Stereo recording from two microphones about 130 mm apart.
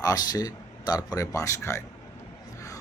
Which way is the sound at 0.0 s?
30° left (ahead or behind).